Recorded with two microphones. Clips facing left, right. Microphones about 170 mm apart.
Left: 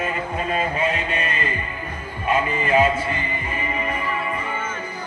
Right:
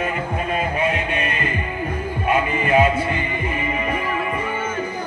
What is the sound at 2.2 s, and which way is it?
Music, 10° right (ahead or behind).